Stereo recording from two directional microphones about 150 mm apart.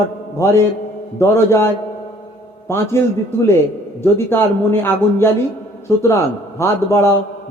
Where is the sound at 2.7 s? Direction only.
15° left (ahead or behind).